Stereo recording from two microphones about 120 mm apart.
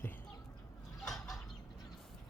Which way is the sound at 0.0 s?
20° left (ahead or behind).